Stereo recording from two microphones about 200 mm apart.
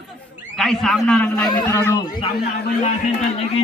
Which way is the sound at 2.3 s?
50° left (ahead or behind).